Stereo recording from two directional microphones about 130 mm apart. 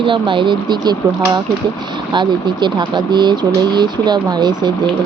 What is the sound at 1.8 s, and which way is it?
Speech, 35° right (ahead or behind).